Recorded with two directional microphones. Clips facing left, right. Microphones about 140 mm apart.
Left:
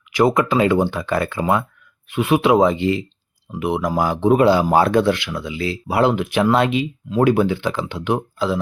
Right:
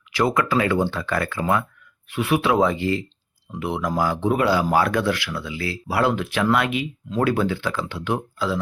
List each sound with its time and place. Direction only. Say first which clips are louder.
0.1 s speech: left 4 dB; 20° left (ahead or behind)